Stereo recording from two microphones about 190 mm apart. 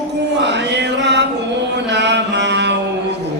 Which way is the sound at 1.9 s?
65° right (ahead or behind).